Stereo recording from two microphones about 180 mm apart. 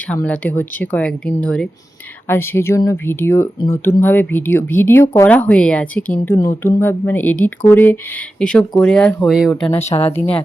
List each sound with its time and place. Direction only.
0.1 s speech: 10° left (ahead or behind)
9.8 s speech: 35° left (ahead or behind)
10.1 s speech: 10° left (ahead or behind)